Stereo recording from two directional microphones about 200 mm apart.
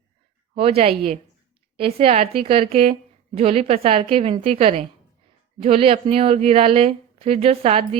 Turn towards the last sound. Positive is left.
turn(degrees=-30)  # may be behind; listen again after turning